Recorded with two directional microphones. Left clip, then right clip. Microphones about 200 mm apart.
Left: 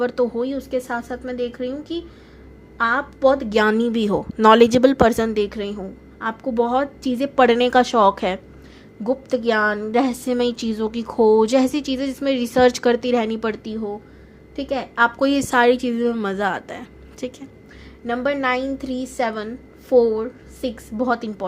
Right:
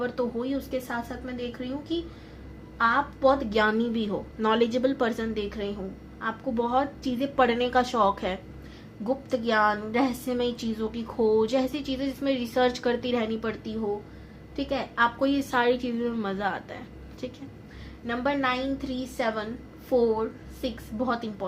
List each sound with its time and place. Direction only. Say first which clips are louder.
0.0 s a woman's voice: left 8 dB; 50° left (ahead or behind)